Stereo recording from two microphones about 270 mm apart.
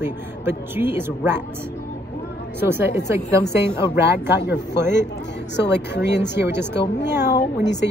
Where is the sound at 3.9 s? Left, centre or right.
Centre.